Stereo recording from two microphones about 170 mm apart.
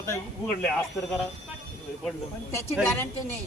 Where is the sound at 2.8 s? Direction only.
15° left (ahead or behind).